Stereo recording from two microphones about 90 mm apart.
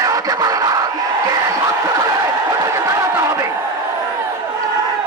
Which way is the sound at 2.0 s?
40° right (ahead or behind).